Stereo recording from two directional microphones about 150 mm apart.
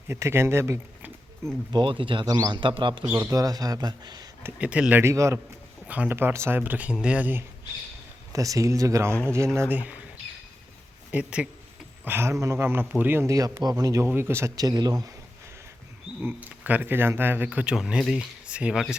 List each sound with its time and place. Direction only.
0.1 s speech: 15° right (ahead or behind)
1.7 s speech: 35° right (ahead or behind)
3.1 s speech: 20° right (ahead or behind)
4.4 s speech: 10° right (ahead or behind)
8.3 s speech: 20° right (ahead or behind)
11.1 s speech: 5° right (ahead or behind); by 15.1 s 25° right (ahead or behind)
16.2 s speech: 10° right (ahead or behind)